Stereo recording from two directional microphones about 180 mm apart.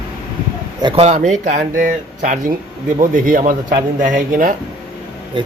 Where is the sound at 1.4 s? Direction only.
45° right (ahead or behind).